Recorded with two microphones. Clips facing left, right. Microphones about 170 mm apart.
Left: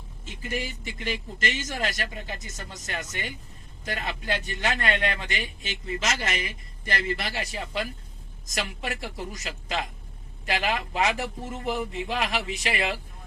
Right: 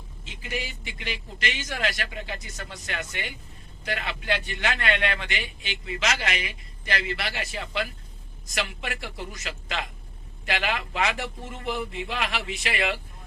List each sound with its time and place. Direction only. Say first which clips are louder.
0.3 s a man's voice: left 2 dB; 50° left (ahead or behind)